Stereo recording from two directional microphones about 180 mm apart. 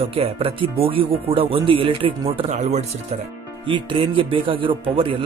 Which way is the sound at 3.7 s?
30° right (ahead or behind).